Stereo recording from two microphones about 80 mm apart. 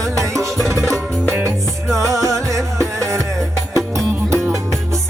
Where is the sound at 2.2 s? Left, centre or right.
Right.